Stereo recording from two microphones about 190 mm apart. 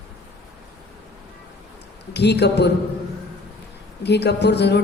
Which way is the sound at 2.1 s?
60° left (ahead or behind).